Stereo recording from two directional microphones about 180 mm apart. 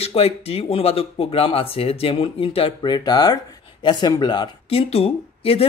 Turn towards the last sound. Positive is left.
turn(degrees=30)  # may be behind; listen again after turning